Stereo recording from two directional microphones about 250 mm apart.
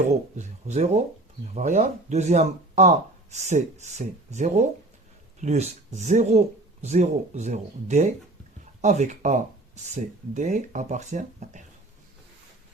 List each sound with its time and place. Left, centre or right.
0.1 s speech: right